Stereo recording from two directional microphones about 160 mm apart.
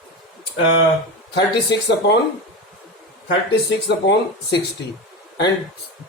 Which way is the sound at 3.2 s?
90° left.